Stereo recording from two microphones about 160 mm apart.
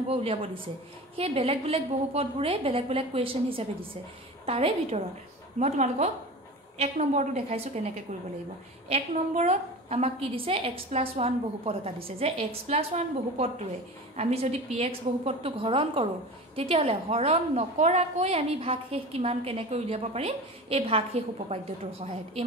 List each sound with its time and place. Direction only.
0.1 s a woman's voice: 35° right (ahead or behind)